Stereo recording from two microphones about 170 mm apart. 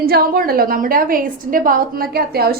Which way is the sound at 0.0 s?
60° right (ahead or behind).